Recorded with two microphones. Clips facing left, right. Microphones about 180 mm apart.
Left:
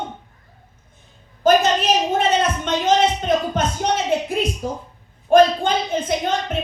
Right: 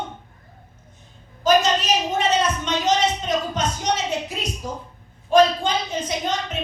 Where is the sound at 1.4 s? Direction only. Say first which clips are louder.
Left 3 dB; 55° left (ahead or behind).